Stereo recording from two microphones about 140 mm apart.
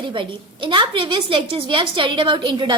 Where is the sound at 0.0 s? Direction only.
35° right (ahead or behind).